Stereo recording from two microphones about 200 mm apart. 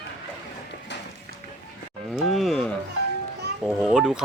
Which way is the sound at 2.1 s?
Centre (ahead or behind).